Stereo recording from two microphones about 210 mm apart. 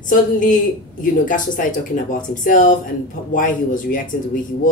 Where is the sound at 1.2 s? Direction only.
40° left (ahead or behind).